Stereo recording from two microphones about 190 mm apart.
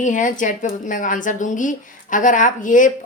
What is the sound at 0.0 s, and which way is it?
A woman's voice, 45° left (ahead or behind).